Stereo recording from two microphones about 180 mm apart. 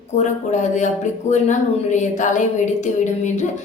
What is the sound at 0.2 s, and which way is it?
A woman's voice, 40° left (ahead or behind).